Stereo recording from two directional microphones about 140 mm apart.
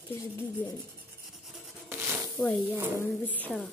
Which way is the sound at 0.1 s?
20° left (ahead or behind).